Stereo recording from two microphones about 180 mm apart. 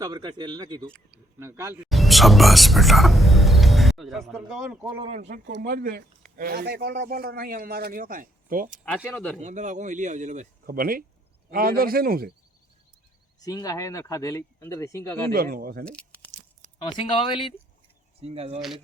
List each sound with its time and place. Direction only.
0.0 s speech: 20° right (ahead or behind)
0.9 s speech: 5° left (ahead or behind)
1.4 s speech: 15° right (ahead or behind)
5.1 s speech: 40° right (ahead or behind)
5.5 s speech: 60° right (ahead or behind)
9.0 s speech: 10° left (ahead or behind)
9.4 s a man's voice: 40° right (ahead or behind)
13.4 s speech: 20° left (ahead or behind)
15.3 s speech: 55° right (ahead or behind)
15.8 s crumpling: 5° left (ahead or behind)
16.7 s speech: 25° left (ahead or behind)
18.2 s speech: 35° right (ahead or behind)